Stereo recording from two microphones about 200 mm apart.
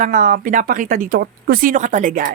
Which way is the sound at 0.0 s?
40° right (ahead or behind).